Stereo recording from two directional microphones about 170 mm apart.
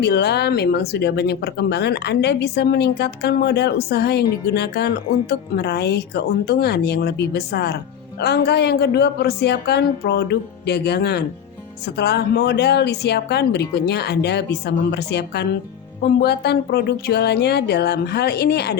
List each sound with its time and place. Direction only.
0.0 s speech: 80° left